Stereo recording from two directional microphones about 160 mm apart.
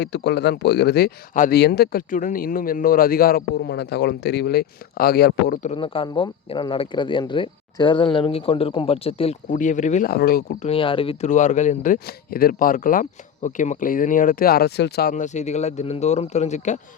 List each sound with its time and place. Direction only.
0.0 s speech: 90° left; by 1.5 s 65° left (ahead or behind)
1.5 s speech: 85° left
5.7 s speech: 35° left (ahead or behind)
9.5 s speech: 50° left (ahead or behind)
10.1 s speech: 70° left (ahead or behind)
10.6 s speech: 35° left (ahead or behind)
11.3 s speech: 50° left (ahead or behind); by 15.1 s 85° left
15.1 s speech: 50° left (ahead or behind)